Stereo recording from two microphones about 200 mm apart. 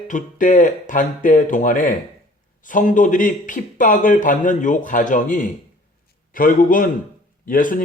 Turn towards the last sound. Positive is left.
turn(degrees=45)  # may be behind; listen again after turning